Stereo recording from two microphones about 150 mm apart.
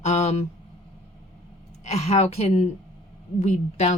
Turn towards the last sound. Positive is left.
turn(degrees=50)  # may be behind; listen again after turning